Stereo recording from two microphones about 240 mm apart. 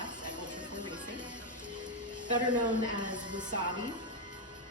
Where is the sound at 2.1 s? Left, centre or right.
Centre.